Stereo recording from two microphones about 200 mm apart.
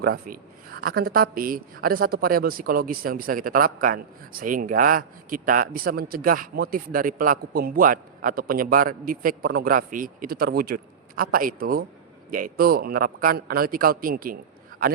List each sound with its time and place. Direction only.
0.0 s speech: 50° right (ahead or behind)